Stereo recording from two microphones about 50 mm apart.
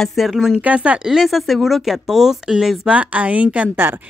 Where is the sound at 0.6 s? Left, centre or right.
Right.